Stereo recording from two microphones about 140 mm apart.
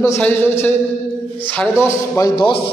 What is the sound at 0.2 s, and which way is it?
A man's voice, 15° left (ahead or behind).